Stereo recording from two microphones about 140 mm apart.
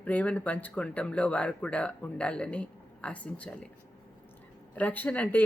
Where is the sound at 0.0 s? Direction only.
10° left (ahead or behind).